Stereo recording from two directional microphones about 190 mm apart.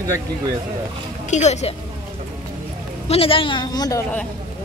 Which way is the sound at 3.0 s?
30° left (ahead or behind).